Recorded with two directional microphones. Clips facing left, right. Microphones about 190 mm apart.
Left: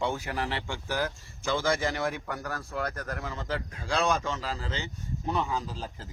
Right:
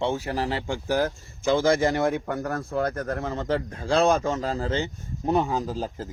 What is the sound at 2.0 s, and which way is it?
Speech, 25° right (ahead or behind).